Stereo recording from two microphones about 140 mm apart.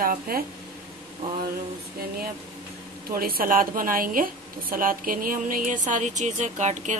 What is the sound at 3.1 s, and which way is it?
A woman's voice, 90° right.